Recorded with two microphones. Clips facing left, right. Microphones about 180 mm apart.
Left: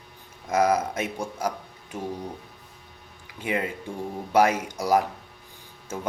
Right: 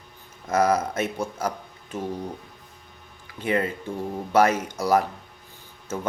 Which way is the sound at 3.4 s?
10° left (ahead or behind).